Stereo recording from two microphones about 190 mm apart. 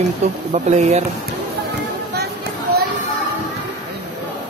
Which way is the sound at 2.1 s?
55° right (ahead or behind).